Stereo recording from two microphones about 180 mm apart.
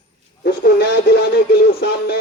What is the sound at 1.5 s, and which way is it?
Speech, 60° left (ahead or behind).